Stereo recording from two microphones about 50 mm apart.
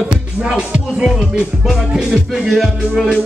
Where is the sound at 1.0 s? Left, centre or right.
Centre.